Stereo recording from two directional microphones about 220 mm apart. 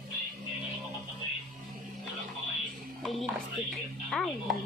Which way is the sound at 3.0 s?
Centre (ahead or behind).